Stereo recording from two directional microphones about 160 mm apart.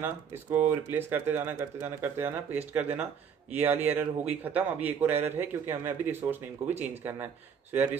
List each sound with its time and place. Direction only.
0.0 s speech: 15° right (ahead or behind)